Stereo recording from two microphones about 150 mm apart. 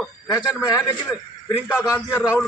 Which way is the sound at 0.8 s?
25° left (ahead or behind).